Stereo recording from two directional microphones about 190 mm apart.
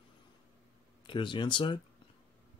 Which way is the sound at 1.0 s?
25° left (ahead or behind).